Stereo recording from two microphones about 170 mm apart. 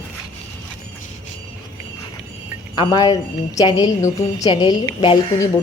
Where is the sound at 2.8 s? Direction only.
25° left (ahead or behind).